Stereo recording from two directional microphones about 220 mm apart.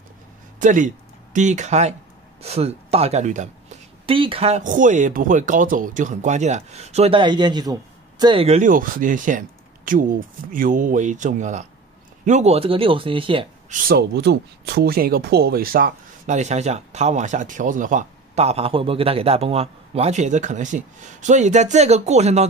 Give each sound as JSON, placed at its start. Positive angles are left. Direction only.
{"t": 0.6, "sound": "speech", "side_deg": -35}
{"t": 13.8, "sound": "speech", "side_deg": -45}